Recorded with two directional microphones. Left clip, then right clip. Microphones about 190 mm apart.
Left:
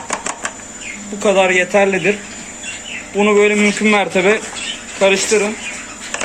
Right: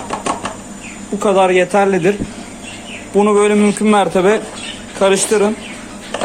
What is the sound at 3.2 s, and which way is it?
A man's voice, 15° right (ahead or behind).